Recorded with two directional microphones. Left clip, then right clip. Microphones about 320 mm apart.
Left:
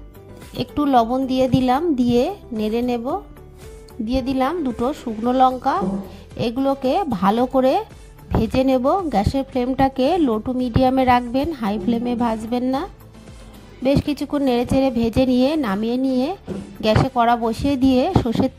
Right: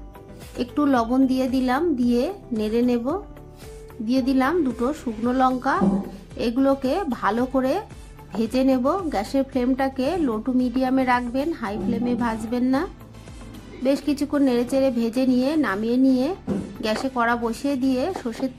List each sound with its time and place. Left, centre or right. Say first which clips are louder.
0.6 s a woman's voice: left 4 dB; left